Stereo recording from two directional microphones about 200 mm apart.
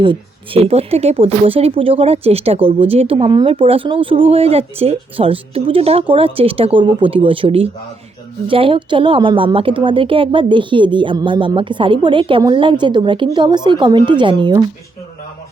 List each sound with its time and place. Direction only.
0.0 s speech: 25° right (ahead or behind)